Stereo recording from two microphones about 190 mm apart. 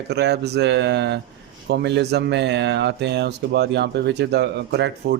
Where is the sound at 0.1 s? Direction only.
60° right (ahead or behind).